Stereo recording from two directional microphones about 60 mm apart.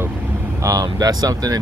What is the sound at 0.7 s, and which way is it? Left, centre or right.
Speech, right.